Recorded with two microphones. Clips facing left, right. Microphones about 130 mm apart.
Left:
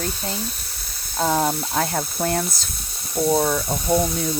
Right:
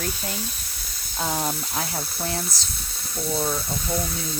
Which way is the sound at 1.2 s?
55° left (ahead or behind).